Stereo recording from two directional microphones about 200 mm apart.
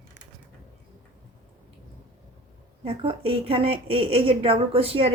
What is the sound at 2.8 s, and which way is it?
A woman's voice, 30° right (ahead or behind).